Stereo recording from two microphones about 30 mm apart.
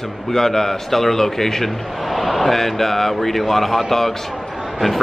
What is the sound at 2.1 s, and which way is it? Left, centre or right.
A man's voice, centre.